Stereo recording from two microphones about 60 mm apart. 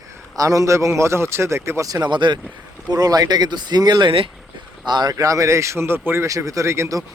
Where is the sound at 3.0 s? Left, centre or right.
Right.